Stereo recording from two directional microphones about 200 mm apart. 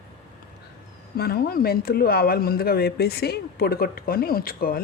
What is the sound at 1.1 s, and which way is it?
Speech, 50° left (ahead or behind).